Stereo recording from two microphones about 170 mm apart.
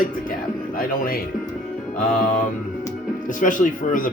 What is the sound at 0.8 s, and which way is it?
Speech, 60° left (ahead or behind).